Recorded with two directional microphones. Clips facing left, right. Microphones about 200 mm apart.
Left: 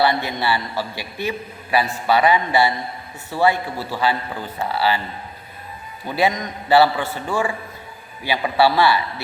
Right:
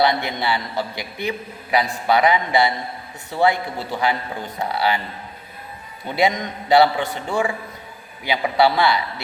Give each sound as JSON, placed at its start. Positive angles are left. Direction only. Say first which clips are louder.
{"t": 0.0, "sound": "a man's voice", "louder": "even", "side_deg": -15}
{"t": 6.1, "sound": "a man's voice", "louder": "even", "side_deg": -20}